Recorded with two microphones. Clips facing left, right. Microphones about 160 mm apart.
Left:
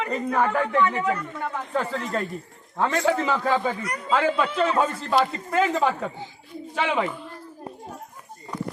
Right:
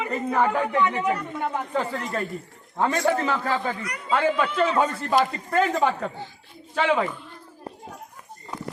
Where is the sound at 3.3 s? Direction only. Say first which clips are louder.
Left 2 dB; 10° left (ahead or behind).